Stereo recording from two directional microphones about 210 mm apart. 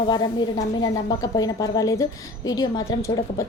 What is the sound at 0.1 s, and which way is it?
A woman's voice, 20° left (ahead or behind).